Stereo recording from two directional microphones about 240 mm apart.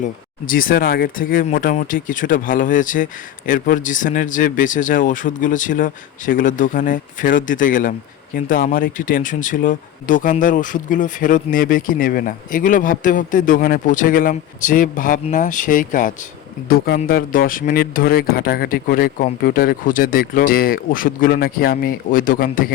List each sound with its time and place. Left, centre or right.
0.0 s speech: left